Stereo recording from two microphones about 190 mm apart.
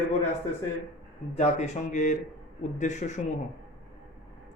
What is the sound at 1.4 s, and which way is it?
Speech, 35° left (ahead or behind).